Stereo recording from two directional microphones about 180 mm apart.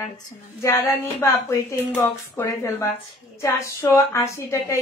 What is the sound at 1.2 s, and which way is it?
A woman's voice, 15° left (ahead or behind).